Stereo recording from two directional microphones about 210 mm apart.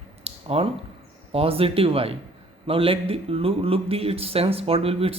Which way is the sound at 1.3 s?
25° right (ahead or behind).